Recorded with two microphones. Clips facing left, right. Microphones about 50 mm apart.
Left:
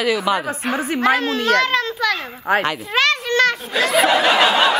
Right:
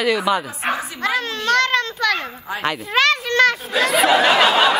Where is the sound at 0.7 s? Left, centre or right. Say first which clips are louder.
Left 6 dB; left.